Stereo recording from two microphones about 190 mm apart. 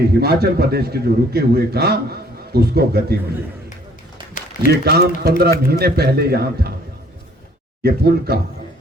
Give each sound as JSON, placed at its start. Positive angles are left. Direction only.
{"t": 0.0, "sound": "a man's voice", "side_deg": -55}
{"t": 4.7, "sound": "a man's voice", "side_deg": -55}
{"t": 7.8, "sound": "a man's voice", "side_deg": -55}